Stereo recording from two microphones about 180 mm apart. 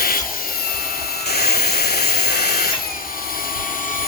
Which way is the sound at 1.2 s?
60° left (ahead or behind).